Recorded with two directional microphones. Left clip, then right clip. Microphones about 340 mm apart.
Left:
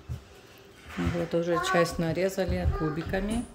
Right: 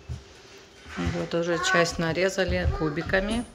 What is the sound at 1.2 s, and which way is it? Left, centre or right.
Speech, centre.